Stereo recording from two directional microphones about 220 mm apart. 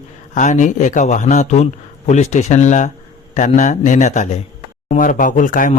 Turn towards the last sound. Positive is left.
turn(degrees=40)  # may be behind; listen again after turning